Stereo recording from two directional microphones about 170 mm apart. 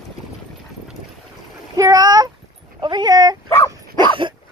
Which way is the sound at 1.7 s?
20° right (ahead or behind).